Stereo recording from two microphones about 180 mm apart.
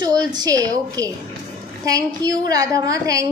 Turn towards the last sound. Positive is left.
turn(degrees=-20)  # may be behind; listen again after turning